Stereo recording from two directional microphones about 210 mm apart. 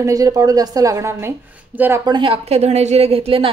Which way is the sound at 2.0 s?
25° right (ahead or behind).